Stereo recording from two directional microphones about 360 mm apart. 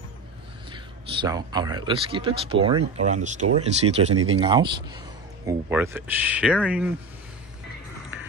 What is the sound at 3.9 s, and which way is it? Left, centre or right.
Speech, centre.